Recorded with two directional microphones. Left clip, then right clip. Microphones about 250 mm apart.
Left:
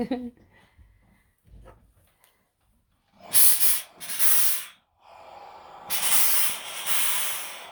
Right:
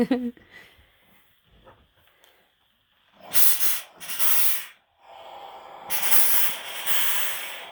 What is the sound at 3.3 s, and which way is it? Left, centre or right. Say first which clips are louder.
Hiss: left 1 dB; centre.